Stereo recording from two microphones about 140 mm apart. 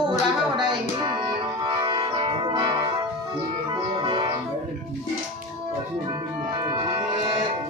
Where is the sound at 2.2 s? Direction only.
35° right (ahead or behind).